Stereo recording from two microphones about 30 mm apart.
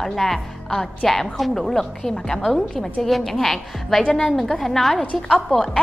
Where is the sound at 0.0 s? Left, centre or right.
Centre.